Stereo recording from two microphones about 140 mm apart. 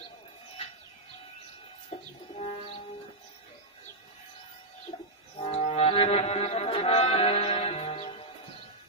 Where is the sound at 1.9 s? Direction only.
50° left (ahead or behind).